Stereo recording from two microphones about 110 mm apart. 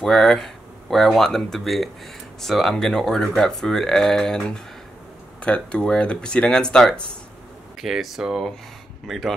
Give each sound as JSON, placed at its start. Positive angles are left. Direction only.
{"t": 0.0, "sound": "speech", "side_deg": 5}